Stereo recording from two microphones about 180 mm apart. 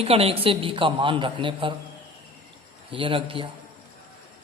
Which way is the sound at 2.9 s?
30° right (ahead or behind).